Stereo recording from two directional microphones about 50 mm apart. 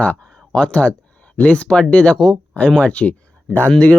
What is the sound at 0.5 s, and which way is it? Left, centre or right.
Speech, left.